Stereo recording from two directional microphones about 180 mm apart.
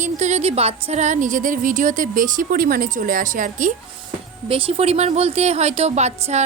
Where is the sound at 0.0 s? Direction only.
40° right (ahead or behind).